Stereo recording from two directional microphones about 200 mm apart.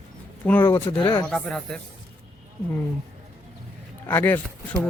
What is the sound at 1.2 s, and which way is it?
Speech, centre (ahead or behind).